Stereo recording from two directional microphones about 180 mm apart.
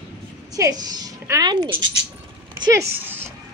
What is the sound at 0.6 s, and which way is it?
A woman's voice, 20° right (ahead or behind).